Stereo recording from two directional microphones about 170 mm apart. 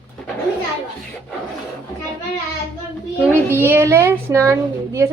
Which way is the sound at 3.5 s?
10° right (ahead or behind).